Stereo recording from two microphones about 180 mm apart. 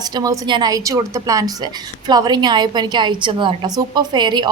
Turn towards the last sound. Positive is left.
turn(degrees=-25)  # may be behind; listen again after turning